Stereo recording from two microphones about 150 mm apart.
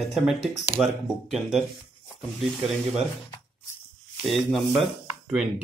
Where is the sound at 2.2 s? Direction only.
Centre (ahead or behind).